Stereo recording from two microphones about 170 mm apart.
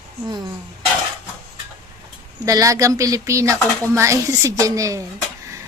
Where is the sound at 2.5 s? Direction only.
20° right (ahead or behind).